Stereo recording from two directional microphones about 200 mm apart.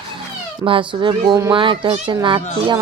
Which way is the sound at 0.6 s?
25° right (ahead or behind).